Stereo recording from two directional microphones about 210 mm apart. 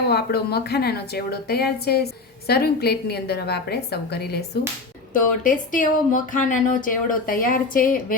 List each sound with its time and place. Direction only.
0.1 s a woman's voice: 50° left (ahead or behind)